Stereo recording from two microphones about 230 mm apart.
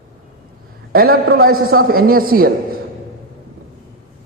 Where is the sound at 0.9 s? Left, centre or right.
Right.